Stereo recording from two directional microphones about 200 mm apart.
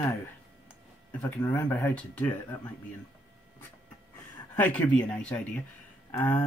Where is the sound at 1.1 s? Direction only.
10° left (ahead or behind).